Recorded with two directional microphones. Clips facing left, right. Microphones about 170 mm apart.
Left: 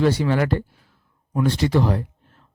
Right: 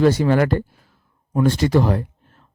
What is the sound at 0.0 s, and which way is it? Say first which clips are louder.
Speech: right 4 dB; 45° right (ahead or behind).